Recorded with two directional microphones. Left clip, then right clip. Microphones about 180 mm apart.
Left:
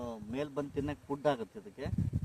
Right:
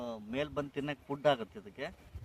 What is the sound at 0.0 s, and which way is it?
A man's voice, 15° right (ahead or behind).